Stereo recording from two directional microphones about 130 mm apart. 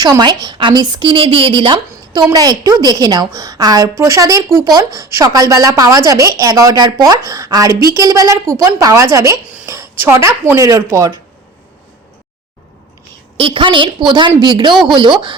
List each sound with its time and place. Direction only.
0.0 s a woman's voice: 30° right (ahead or behind)
9.6 s a sound: 20° right (ahead or behind)
10.5 s a woman's voice: 25° right (ahead or behind)
13.3 s a woman's voice: 40° right (ahead or behind)